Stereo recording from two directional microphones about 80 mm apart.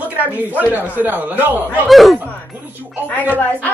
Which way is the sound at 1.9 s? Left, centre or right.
Centre.